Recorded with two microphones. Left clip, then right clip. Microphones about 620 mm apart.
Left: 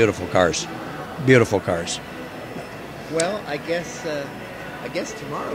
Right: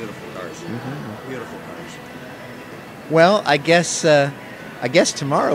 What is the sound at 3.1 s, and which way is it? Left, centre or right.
A man's voice, right.